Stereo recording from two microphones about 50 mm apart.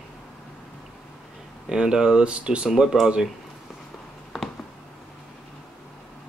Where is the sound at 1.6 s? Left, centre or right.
Centre.